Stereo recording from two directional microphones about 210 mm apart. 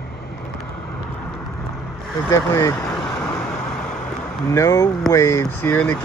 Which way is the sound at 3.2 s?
10° left (ahead or behind).